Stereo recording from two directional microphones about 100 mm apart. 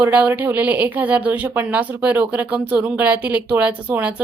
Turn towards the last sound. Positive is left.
turn(degrees=-15)  # may be behind; listen again after turning